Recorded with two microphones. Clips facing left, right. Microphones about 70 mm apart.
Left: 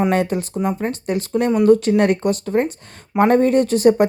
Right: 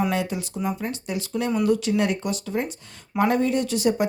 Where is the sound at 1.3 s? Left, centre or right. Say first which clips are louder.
Left 8 dB; left.